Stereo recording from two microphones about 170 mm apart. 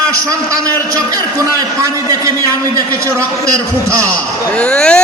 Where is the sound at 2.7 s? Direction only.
20° right (ahead or behind).